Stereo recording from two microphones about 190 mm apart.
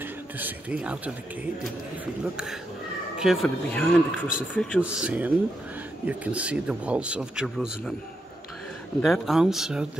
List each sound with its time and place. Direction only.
0.0 s speech: 10° right (ahead or behind)
2.3 s speech: 5° right (ahead or behind)
4.7 s speech: 5° right (ahead or behind)
9.0 s speech: centre (ahead or behind)